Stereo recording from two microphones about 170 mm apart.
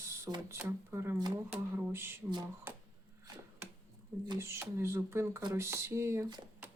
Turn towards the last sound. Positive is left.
turn(degrees=-20)  # may be behind; listen again after turning